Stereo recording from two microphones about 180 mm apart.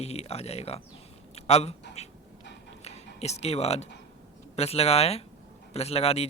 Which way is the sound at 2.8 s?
35° left (ahead or behind).